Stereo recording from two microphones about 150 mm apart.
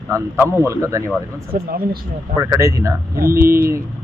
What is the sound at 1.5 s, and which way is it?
Speech, 90° right.